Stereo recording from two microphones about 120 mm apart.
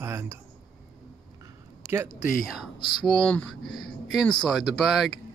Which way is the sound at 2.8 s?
35° left (ahead or behind).